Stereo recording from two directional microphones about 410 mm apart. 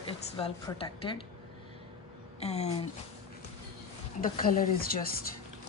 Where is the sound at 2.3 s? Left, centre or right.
Centre.